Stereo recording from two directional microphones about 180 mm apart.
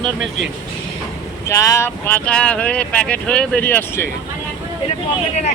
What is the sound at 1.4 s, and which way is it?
Speech, 15° left (ahead or behind).